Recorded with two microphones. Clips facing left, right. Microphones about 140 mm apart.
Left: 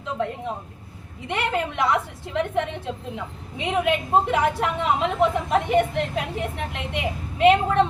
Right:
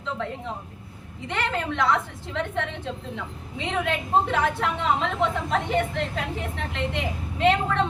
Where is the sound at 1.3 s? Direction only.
15° left (ahead or behind).